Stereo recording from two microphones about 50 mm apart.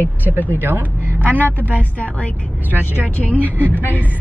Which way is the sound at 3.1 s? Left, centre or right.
Left.